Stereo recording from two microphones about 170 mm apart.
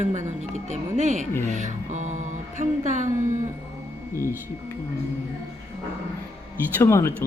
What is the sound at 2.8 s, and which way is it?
Speech, 45° right (ahead or behind).